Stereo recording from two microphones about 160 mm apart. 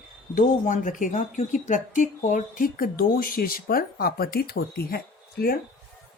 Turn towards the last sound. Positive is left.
turn(degrees=70)  # may be behind; listen again after turning